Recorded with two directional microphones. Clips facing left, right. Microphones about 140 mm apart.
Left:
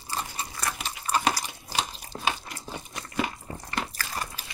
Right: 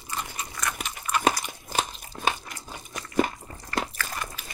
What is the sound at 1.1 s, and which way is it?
Biting, 35° left (ahead or behind).